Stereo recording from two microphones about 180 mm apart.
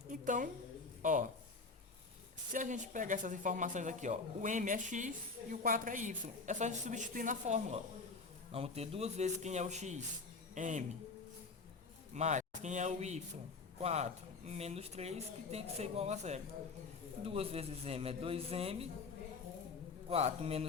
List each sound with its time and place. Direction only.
0.1 s a sound: 45° right (ahead or behind)
1.0 s speech: 45° right (ahead or behind)
2.5 s speech: 45° right (ahead or behind)
12.1 s speech: 40° right (ahead or behind)
20.1 s speech: 35° right (ahead or behind)